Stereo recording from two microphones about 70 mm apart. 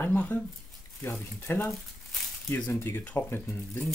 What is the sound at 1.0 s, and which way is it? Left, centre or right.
Speech, left.